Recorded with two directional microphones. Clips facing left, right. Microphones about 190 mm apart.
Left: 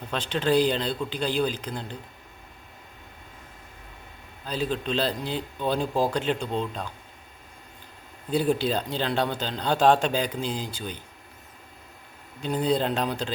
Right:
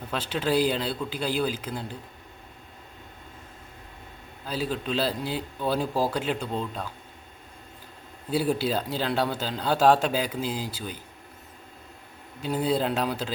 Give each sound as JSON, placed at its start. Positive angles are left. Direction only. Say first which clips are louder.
{"t": 0.1, "sound": "a man's voice", "louder": "left 2 dB", "side_deg": -5}
{"t": 4.4, "sound": "speech", "louder": "left 1 dB", "side_deg": -5}
{"t": 8.3, "sound": "speech", "louder": "left 1 dB", "side_deg": -5}
{"t": 12.4, "sound": "speech", "louder": "left 1 dB", "side_deg": -5}